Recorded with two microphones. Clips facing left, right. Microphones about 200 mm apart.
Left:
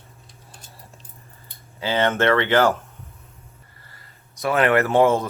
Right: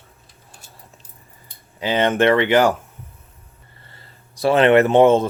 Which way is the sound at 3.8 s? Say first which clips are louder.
Right 3 dB; 25° right (ahead or behind).